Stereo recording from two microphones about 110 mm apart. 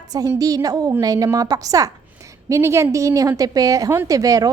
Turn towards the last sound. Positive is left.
turn(degrees=-30)  # may be behind; listen again after turning